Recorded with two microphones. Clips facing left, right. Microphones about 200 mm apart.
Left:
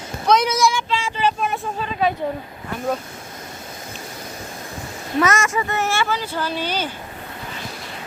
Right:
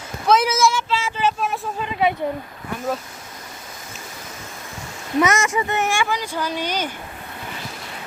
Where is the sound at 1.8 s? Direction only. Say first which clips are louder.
Right 1 dB; 20° right (ahead or behind).